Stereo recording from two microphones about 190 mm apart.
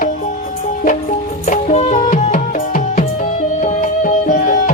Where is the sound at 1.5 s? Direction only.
35° left (ahead or behind).